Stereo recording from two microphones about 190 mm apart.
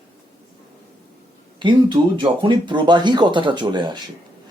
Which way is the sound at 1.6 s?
25° right (ahead or behind).